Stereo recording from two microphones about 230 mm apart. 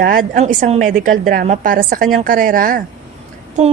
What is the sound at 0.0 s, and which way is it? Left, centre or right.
A woman's voice, right.